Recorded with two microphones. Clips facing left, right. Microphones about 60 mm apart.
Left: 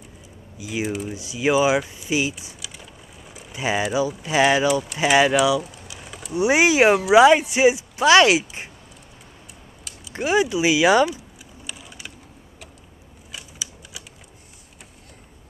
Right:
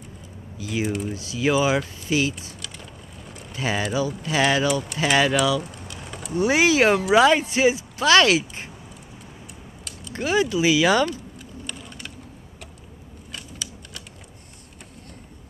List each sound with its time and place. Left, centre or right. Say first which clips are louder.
0.6 s speech: right 1 dB; centre
0.8 s speech: even; centre
1.1 s speech: left 3 dB; centre
2.4 s a sound: right 1 dB; centre
3.5 s speech: left 2 dB; centre
5.6 s a sound: even; centre
6.3 s speech: left 1 dB; centre
10.1 s speech: left 1 dB; left
11.6 s typing: even; centre
13.3 s a sound: right 1 dB; centre